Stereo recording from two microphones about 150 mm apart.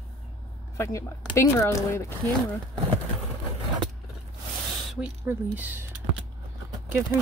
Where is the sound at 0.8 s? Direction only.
20° left (ahead or behind).